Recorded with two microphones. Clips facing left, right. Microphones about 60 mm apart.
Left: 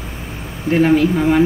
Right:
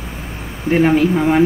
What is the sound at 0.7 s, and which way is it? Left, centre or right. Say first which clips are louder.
Speech: even; centre.